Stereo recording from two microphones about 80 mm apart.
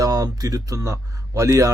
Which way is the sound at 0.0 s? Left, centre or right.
Right.